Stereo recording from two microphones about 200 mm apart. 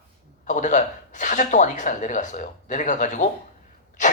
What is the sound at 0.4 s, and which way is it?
Speech, 40° left (ahead or behind).